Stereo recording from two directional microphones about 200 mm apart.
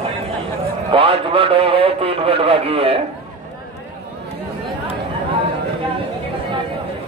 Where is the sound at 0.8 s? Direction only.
25° right (ahead or behind).